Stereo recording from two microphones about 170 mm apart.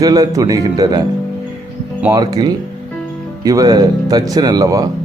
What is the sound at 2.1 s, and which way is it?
A man's voice, 25° right (ahead or behind).